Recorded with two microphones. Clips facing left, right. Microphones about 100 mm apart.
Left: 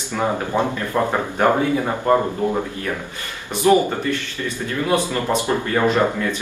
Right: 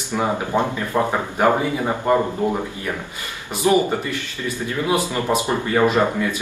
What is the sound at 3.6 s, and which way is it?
Speech, 15° right (ahead or behind).